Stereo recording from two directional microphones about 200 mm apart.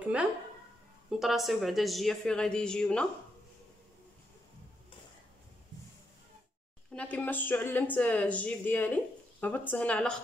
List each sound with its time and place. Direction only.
1.2 s speech: centre (ahead or behind)
6.9 s speech: 5° left (ahead or behind)